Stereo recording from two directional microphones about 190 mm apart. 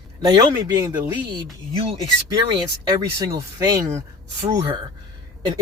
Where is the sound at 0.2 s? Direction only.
20° right (ahead or behind).